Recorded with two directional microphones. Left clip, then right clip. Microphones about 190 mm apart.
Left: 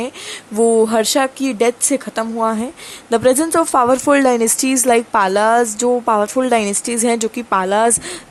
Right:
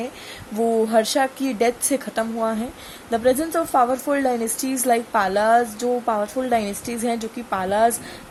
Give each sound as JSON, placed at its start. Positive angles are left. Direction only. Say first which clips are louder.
{"t": 0.0, "sound": "a woman's voice", "louder": "left 6 dB", "side_deg": 25}